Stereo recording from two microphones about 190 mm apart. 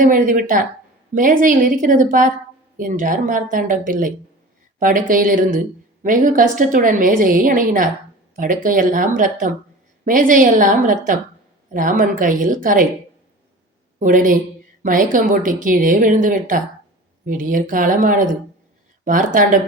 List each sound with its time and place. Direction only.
0.0 s a woman's voice: 45° right (ahead or behind)
14.0 s a woman's voice: 45° right (ahead or behind)